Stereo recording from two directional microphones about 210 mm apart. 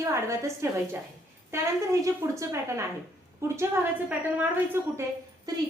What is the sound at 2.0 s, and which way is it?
A woman's voice, 15° right (ahead or behind).